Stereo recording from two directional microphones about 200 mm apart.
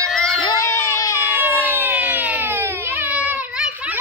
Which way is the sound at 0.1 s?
Centre (ahead or behind).